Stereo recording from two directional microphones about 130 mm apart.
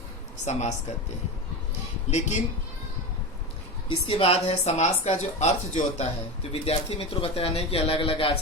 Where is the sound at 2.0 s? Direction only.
60° left (ahead or behind).